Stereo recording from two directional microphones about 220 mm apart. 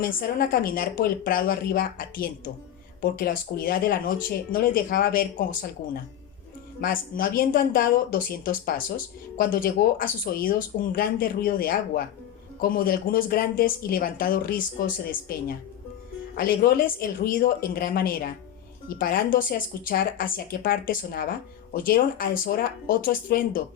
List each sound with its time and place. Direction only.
0.0 s speech: 40° left (ahead or behind)